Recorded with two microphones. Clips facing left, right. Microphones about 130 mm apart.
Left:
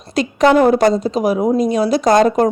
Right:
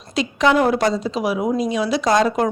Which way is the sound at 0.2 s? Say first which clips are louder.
Left 5 dB; 50° left (ahead or behind).